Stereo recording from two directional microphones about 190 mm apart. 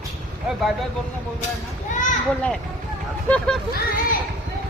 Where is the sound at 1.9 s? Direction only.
40° left (ahead or behind).